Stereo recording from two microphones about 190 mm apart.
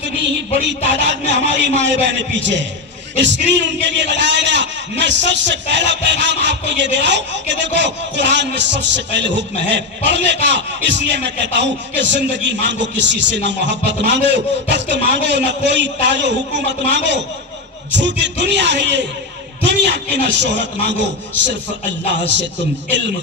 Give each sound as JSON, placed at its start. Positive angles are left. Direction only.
{"t": 0.8, "sound": "a man's voice", "side_deg": -65}